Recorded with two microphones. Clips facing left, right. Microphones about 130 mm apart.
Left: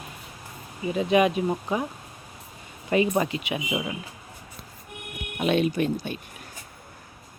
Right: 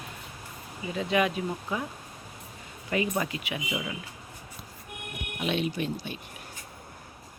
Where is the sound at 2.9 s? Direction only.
30° left (ahead or behind).